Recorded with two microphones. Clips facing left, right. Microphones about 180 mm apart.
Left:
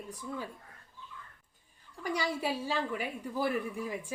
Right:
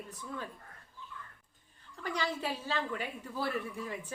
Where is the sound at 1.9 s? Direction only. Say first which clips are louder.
Left 2 dB; 10° left (ahead or behind).